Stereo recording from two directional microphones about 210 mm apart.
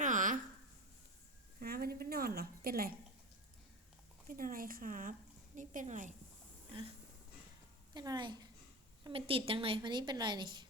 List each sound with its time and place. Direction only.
0.0 s a sound: 40° right (ahead or behind)
1.5 s a woman's voice: 45° right (ahead or behind)
4.3 s speech: 40° right (ahead or behind)
7.9 s a woman's voice: 20° right (ahead or behind)